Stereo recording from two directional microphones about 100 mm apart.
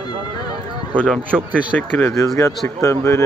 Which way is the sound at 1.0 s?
10° left (ahead or behind).